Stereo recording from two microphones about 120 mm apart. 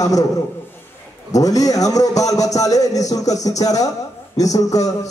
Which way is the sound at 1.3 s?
30° left (ahead or behind).